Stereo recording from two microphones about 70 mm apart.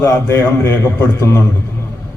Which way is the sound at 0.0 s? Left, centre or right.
Left.